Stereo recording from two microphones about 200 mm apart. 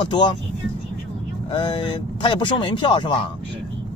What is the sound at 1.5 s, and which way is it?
Speech, 25° left (ahead or behind).